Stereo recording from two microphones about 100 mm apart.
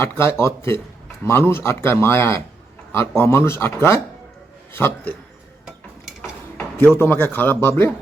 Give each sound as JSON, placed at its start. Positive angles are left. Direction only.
{"t": 0.0, "sound": "speech", "side_deg": 25}
{"t": 5.6, "sound": "dishes", "side_deg": -5}
{"t": 6.6, "sound": "a sound", "side_deg": 15}
{"t": 7.0, "sound": "speech", "side_deg": 20}